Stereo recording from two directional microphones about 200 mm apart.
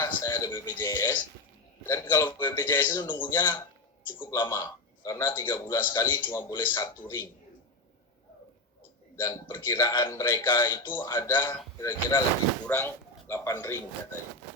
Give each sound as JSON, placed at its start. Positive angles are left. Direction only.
{"t": 0.0, "sound": "a man's voice", "side_deg": 15}
{"t": 9.1, "sound": "a man's voice", "side_deg": 15}
{"t": 10.8, "sound": "a man's voice", "side_deg": 10}